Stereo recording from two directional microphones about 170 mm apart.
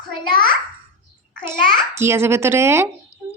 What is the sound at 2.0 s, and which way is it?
Speech, 15° right (ahead or behind).